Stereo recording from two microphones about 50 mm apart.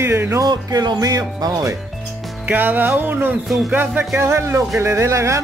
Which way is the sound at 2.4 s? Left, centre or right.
Right.